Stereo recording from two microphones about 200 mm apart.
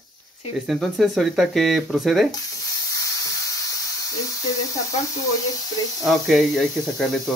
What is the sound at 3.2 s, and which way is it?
Electric toothbrush, 15° left (ahead or behind).